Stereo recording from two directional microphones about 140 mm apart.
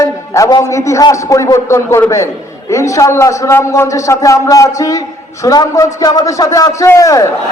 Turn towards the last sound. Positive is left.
turn(degrees=25)  # may be behind; listen again after turning